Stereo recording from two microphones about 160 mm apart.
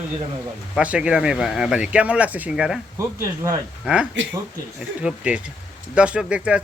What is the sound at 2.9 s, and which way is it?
Speech, 20° right (ahead or behind).